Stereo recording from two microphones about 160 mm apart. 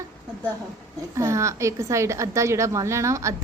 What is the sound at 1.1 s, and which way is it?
A woman's voice, 20° right (ahead or behind).